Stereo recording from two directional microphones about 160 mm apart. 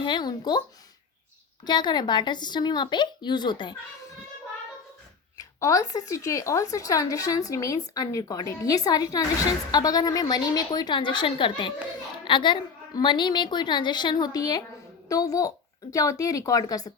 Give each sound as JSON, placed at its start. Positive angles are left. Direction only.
{"t": 0.0, "sound": "speech", "side_deg": 30}
{"t": 1.6, "sound": "speech", "side_deg": 25}
{"t": 5.4, "sound": "speech", "side_deg": 20}